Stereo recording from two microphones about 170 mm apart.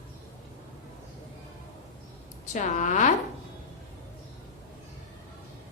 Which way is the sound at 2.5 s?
45° left (ahead or behind).